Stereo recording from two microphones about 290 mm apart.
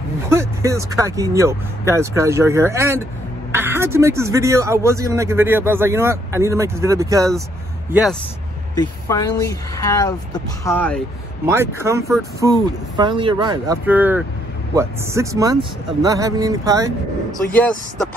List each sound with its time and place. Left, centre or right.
0.3 s speech: centre
7.9 s speech: centre
8.7 s speech: centre
11.4 s speech: centre
17.5 s speech: centre